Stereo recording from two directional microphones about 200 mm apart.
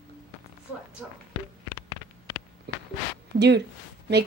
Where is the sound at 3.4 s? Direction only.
60° right (ahead or behind).